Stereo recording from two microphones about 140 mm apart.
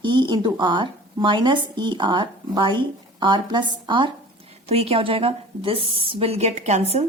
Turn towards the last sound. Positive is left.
turn(degrees=-50)  # may be behind; listen again after turning